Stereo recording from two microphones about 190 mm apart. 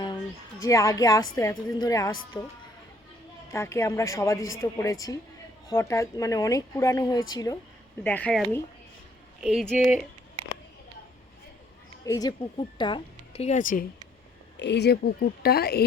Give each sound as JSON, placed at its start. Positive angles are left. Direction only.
{"t": 0.6, "sound": "speech", "side_deg": 15}
{"t": 3.5, "sound": "speech", "side_deg": 15}
{"t": 8.0, "sound": "speech", "side_deg": 5}
{"t": 12.0, "sound": "speech", "side_deg": 20}
{"t": 14.6, "sound": "a woman's voice", "side_deg": 65}